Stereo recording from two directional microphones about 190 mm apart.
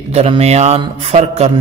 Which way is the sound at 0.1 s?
35° right (ahead or behind).